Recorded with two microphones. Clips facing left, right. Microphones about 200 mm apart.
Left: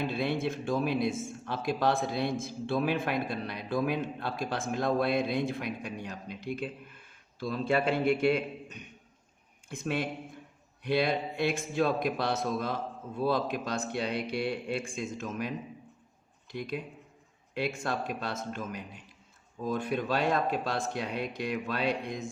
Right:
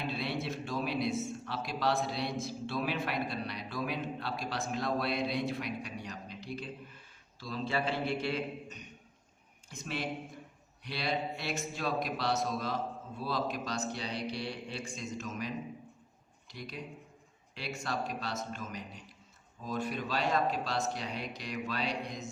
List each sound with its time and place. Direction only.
0.1 s a man's voice: 50° left (ahead or behind)